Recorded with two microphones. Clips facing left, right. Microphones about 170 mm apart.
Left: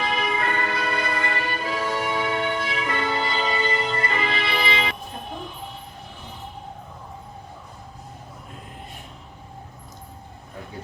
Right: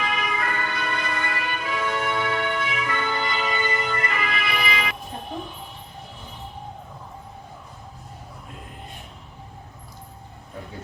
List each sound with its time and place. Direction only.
0.0 s music: 30° left (ahead or behind)
2.0 s music: 15° left (ahead or behind)